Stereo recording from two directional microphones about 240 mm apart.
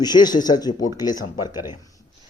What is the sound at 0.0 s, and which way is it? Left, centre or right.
Speech, centre.